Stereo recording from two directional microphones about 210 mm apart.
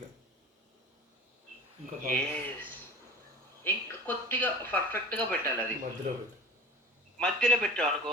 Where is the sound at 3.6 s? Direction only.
10° left (ahead or behind).